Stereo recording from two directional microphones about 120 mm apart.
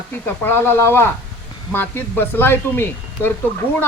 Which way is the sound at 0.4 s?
20° left (ahead or behind).